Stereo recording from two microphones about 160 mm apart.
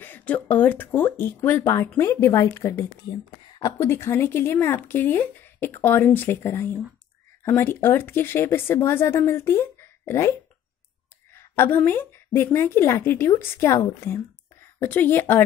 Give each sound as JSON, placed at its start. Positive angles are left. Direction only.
{"t": 0.0, "sound": "a woman's voice", "side_deg": 10}
{"t": 11.3, "sound": "a woman's voice", "side_deg": 15}